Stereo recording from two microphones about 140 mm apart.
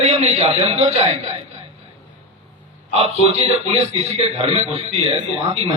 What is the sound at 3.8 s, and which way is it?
A man's voice, 45° right (ahead or behind).